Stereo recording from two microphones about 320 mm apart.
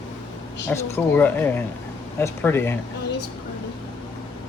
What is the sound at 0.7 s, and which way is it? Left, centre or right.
Speech, centre.